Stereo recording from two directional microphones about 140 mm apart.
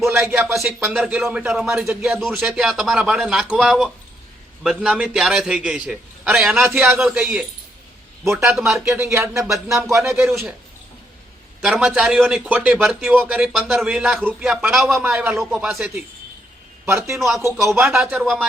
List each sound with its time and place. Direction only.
0.2 s a man's voice: 5° right (ahead or behind)
2.2 s a man's voice: centre (ahead or behind)
8.4 s a man's voice: 5° right (ahead or behind)
8.8 s speech: 20° right (ahead or behind)
9.4 s a man's voice: centre (ahead or behind)
11.6 s a man's voice: 5° right (ahead or behind)
16.8 s speech: 20° right (ahead or behind)
17.2 s a man's voice: centre (ahead or behind)